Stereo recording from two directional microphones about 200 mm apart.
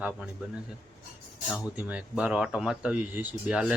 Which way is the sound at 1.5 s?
5° right (ahead or behind).